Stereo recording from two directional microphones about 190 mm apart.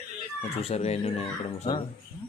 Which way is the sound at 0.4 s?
30° left (ahead or behind).